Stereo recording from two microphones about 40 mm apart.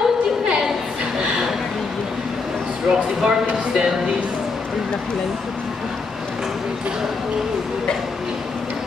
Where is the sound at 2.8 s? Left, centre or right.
Centre.